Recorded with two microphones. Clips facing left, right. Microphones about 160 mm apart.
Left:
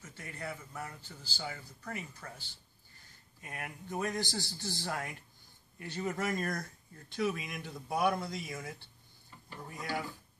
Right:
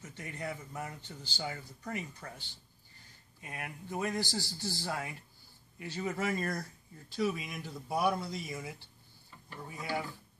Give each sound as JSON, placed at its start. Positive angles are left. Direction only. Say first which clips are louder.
{"t": 0.4, "sound": "a man's voice", "louder": "right 2 dB", "side_deg": -15}
{"t": 3.4, "sound": "a man's voice", "louder": "even", "side_deg": 0}